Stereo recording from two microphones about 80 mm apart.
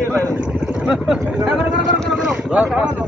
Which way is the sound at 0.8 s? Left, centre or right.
Centre.